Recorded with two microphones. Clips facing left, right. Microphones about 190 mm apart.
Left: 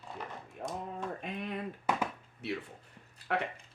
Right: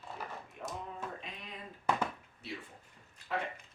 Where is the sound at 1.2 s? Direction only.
60° left (ahead or behind).